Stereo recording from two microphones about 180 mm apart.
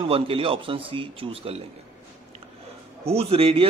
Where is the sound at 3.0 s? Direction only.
35° right (ahead or behind).